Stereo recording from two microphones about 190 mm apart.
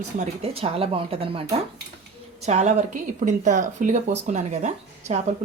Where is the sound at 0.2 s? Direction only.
30° right (ahead or behind).